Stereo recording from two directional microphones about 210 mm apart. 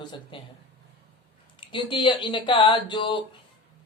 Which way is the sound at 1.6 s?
20° left (ahead or behind).